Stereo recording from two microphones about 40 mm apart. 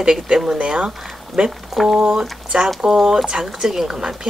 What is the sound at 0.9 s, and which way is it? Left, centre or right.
Speech, centre.